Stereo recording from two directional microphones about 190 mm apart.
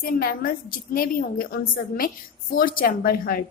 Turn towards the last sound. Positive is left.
turn(degrees=50)  # may be behind; listen again after turning